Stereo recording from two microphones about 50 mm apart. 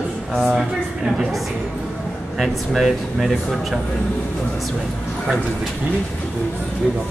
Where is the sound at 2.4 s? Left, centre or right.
Centre.